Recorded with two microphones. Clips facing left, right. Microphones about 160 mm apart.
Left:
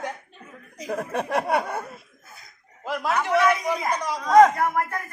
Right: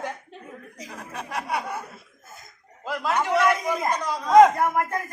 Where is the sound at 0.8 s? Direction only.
55° left (ahead or behind).